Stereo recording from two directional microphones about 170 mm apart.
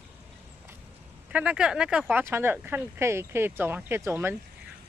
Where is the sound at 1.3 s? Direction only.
5° right (ahead or behind).